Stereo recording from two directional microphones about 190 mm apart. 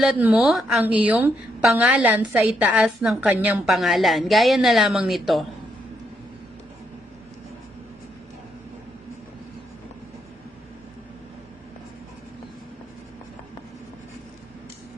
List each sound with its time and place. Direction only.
0.0 s a woman's voice: 5° right (ahead or behind)